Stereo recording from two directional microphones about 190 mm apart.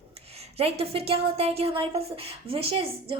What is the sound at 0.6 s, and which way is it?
A woman's voice, 30° right (ahead or behind).